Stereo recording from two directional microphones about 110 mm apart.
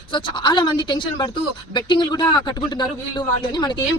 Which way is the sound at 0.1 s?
50° left (ahead or behind).